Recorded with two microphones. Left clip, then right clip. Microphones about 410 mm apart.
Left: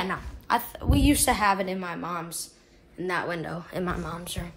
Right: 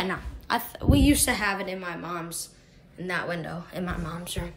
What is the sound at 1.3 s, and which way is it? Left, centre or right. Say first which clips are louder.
A woman's voice: left 3 dB; centre.